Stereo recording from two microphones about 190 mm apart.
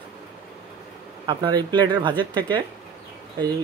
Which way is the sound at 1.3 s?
20° right (ahead or behind).